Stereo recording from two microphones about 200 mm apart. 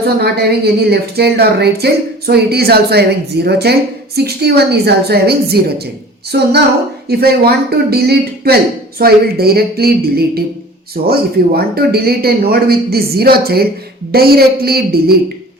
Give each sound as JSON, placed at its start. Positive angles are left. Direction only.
{"t": 0.2, "sound": "a woman's voice", "side_deg": -55}